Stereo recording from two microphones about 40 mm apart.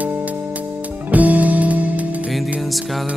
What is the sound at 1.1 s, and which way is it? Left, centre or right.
Music, right.